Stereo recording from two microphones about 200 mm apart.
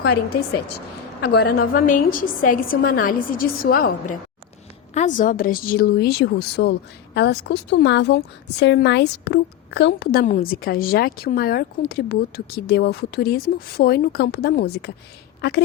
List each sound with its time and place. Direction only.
1.2 s a woman's voice: 55° left (ahead or behind)